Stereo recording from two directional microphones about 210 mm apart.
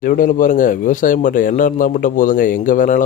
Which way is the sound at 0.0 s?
40° left (ahead or behind).